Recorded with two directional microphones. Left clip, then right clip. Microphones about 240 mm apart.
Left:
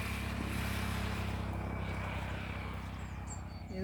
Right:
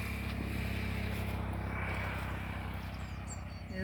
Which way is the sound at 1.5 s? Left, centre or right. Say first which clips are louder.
Right 2 dB; centre.